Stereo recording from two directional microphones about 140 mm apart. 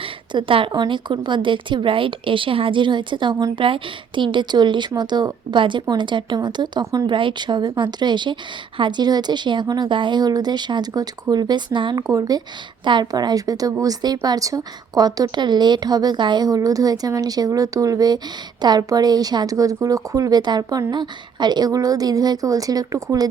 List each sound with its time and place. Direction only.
0.0 s a woman's voice: 40° right (ahead or behind)